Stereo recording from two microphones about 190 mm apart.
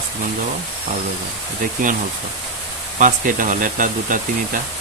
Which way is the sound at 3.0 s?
45° right (ahead or behind).